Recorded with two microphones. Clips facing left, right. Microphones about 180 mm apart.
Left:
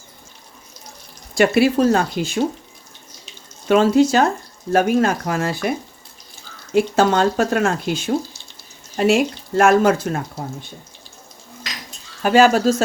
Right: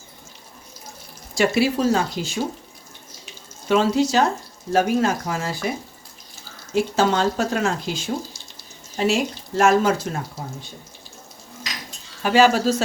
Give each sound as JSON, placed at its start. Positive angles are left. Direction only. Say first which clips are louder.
{"t": 1.4, "sound": "speech", "louder": "left 4 dB", "side_deg": 55}
{"t": 3.7, "sound": "speech", "louder": "left 5 dB", "side_deg": 55}
{"t": 6.7, "sound": "speech", "louder": "left 4 dB", "side_deg": 55}
{"t": 12.2, "sound": "speech", "louder": "left 3 dB", "side_deg": 50}